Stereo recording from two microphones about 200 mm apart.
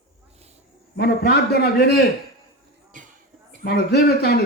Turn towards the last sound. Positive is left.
turn(degrees=55)  # may be behind; listen again after turning